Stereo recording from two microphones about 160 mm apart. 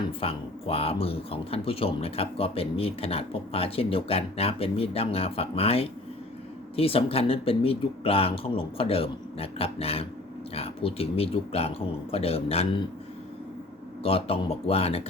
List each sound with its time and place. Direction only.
0.2 s speech: 35° left (ahead or behind)
14.0 s speech: 35° left (ahead or behind)